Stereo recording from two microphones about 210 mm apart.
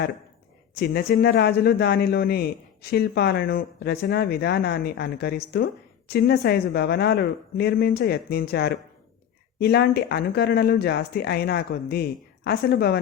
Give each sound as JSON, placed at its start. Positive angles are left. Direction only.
{"t": 0.8, "sound": "speech", "side_deg": 50}